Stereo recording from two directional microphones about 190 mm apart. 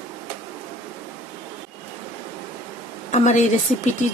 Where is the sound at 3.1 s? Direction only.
35° left (ahead or behind).